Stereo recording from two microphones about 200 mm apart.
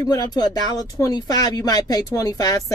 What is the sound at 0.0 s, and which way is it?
Speech, 20° left (ahead or behind).